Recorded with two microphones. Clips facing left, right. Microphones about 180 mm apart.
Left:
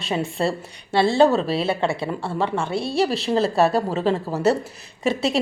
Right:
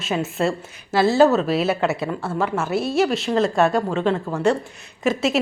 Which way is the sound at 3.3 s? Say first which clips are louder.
Left 1 dB; 35° left (ahead or behind).